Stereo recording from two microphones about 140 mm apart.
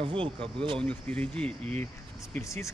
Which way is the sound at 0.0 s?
40° right (ahead or behind).